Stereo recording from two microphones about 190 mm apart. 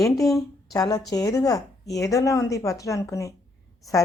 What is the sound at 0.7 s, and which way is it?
A woman's voice, 20° left (ahead or behind).